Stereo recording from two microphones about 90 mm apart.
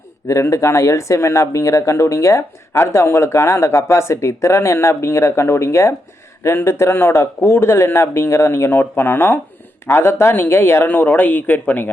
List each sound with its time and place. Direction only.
0.3 s a man's voice: 35° left (ahead or behind); by 11.9 s 20° left (ahead or behind)